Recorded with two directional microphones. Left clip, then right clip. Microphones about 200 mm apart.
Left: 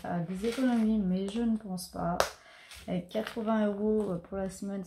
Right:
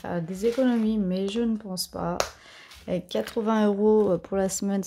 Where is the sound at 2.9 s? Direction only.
50° right (ahead or behind).